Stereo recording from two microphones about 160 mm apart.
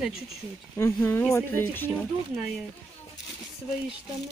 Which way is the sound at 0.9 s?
15° left (ahead or behind).